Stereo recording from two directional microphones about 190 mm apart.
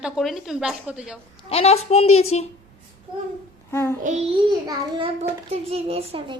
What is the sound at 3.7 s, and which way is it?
Child singing, 15° left (ahead or behind).